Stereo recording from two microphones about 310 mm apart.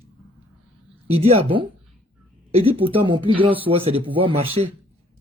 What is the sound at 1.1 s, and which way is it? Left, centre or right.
Speech, centre.